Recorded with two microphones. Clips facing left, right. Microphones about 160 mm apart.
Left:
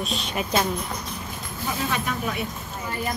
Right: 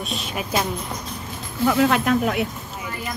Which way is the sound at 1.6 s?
75° right (ahead or behind).